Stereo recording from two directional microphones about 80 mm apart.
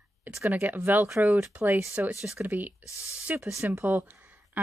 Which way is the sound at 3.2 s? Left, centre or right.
Centre.